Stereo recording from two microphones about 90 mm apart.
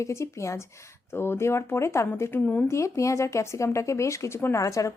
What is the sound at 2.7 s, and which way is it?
Speech, 35° left (ahead or behind).